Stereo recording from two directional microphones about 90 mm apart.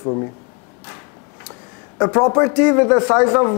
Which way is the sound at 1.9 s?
25° left (ahead or behind).